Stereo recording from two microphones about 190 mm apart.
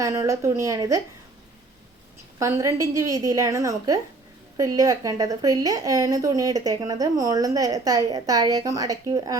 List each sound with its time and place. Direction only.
0.0 s a woman's voice: 15° right (ahead or behind)
2.4 s a woman's voice: 15° right (ahead or behind)